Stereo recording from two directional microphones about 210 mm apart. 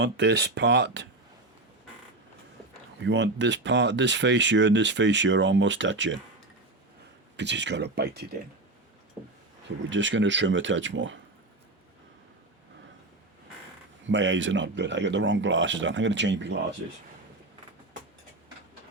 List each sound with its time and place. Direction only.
0.0 s speech: 55° right (ahead or behind)
3.0 s speech: 60° right (ahead or behind)
7.3 s speech: 55° right (ahead or behind)
9.9 s speech: 60° right (ahead or behind)
14.1 s speech: 60° right (ahead or behind)